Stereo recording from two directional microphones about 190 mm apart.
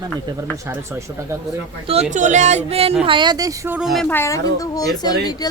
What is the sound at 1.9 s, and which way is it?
Speech, 35° right (ahead or behind).